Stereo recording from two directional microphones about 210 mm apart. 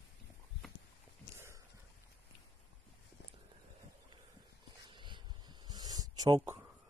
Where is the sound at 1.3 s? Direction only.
15° right (ahead or behind).